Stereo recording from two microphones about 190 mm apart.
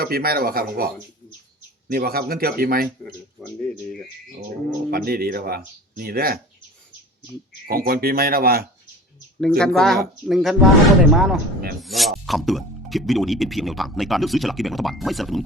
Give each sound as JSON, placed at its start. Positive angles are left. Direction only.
{"t": 0.0, "sound": "speech", "side_deg": -50}
{"t": 1.9, "sound": "speech", "side_deg": -50}
{"t": 3.0, "sound": "speech", "side_deg": 5}
{"t": 4.9, "sound": "speech", "side_deg": -50}
{"t": 7.7, "sound": "speech", "side_deg": -50}
{"t": 9.4, "sound": "speech", "side_deg": 5}